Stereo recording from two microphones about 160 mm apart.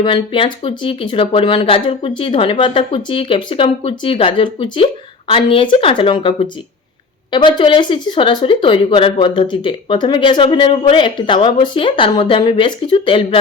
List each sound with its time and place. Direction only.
0.0 s speech: 30° left (ahead or behind)